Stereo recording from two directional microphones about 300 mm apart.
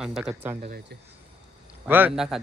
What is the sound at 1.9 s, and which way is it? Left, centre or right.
Speech, centre.